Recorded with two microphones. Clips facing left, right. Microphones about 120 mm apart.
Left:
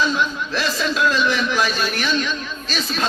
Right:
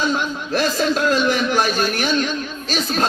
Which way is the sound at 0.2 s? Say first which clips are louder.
Right 2 dB; 50° right (ahead or behind).